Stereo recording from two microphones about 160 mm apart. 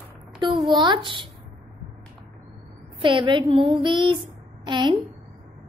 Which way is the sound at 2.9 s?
30° right (ahead or behind).